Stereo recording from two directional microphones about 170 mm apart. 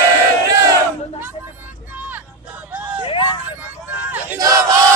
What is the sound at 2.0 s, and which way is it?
Vehicle, 10° right (ahead or behind).